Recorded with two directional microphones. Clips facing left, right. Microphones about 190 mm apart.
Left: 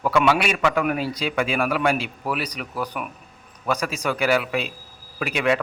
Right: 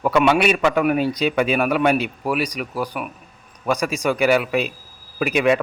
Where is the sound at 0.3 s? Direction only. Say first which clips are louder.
Right 3 dB; 25° right (ahead or behind).